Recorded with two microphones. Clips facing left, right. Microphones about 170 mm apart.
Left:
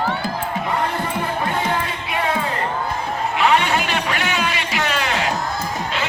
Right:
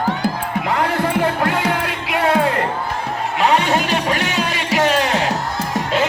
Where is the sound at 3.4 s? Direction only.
40° right (ahead or behind).